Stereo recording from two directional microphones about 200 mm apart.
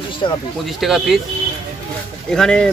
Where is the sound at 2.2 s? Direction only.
5° left (ahead or behind).